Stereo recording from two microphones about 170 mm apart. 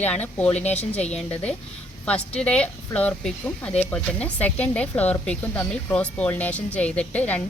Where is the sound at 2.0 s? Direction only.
5° left (ahead or behind).